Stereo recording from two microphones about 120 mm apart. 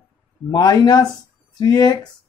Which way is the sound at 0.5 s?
30° left (ahead or behind).